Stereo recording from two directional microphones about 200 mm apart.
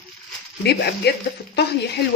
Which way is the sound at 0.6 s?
55° left (ahead or behind).